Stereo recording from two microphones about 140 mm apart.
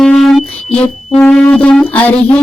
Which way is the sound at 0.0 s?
5° left (ahead or behind).